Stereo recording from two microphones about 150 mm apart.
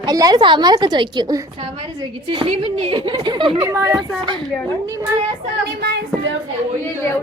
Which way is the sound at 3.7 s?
20° right (ahead or behind).